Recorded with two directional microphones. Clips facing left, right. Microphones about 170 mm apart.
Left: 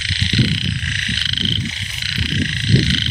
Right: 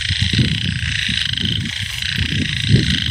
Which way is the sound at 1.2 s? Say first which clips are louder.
Right 1 dB; 60° right (ahead or behind).